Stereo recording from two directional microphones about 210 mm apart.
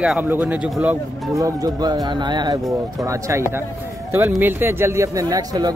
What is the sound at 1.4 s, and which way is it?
A man's voice, 20° right (ahead or behind).